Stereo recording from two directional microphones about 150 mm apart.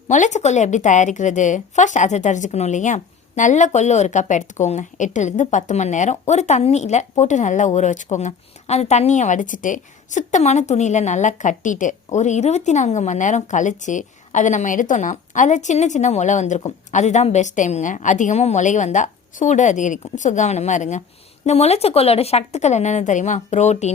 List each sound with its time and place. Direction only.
0.1 s speech: 55° left (ahead or behind)